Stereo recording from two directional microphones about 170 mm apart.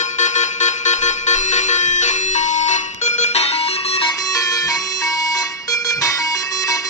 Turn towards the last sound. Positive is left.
turn(degrees=20)  # may be behind; listen again after turning